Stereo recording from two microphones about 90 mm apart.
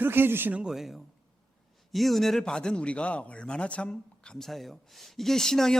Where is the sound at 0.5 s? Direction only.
5° right (ahead or behind).